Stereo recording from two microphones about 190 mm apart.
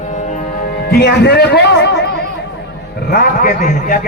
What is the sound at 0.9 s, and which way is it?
A man's voice, 60° left (ahead or behind).